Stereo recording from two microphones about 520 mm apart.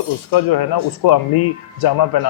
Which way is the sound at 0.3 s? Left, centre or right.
Left.